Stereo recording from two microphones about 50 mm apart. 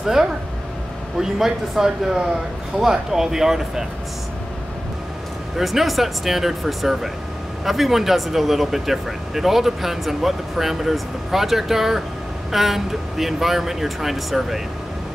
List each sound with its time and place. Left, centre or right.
0.0 s a man's voice: centre
5.6 s speech: centre